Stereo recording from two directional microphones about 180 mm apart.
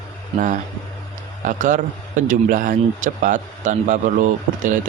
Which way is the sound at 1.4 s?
45° right (ahead or behind).